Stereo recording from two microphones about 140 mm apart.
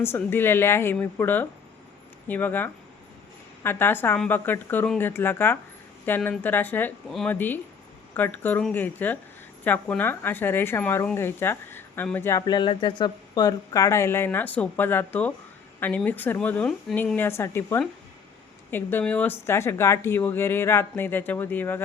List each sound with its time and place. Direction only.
0.0 s speech: 15° left (ahead or behind)
12.4 s speech: 30° left (ahead or behind); by 21.8 s 15° left (ahead or behind)